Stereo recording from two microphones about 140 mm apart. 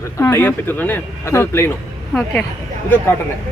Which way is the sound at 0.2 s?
15° left (ahead or behind).